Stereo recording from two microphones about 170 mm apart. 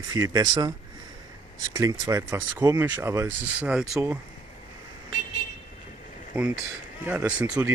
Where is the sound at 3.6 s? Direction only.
5° right (ahead or behind).